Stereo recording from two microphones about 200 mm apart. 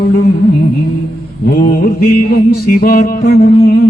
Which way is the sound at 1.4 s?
50° left (ahead or behind).